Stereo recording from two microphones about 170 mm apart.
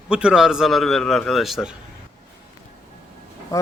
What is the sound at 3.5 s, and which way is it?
Speech, 20° left (ahead or behind).